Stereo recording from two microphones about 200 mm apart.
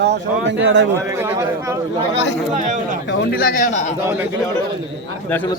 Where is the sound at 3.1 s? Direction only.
50° left (ahead or behind).